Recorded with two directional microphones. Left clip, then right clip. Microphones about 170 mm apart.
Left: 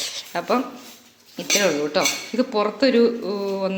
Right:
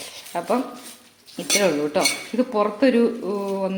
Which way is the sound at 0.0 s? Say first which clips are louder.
Left 2 dB; 5° right (ahead or behind).